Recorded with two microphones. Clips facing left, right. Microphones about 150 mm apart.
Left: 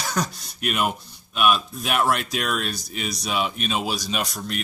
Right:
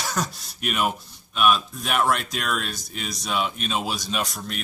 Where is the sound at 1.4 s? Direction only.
Centre (ahead or behind).